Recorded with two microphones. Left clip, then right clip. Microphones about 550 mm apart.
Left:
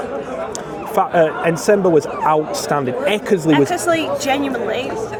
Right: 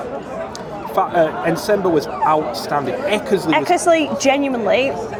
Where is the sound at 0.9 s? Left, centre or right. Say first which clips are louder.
Left 1 dB; left.